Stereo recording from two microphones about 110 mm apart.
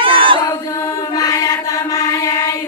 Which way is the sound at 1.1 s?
30° left (ahead or behind).